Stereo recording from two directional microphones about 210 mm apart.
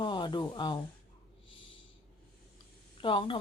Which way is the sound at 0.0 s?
20° left (ahead or behind).